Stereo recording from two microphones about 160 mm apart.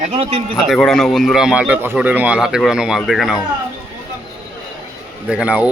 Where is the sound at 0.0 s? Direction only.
40° right (ahead or behind).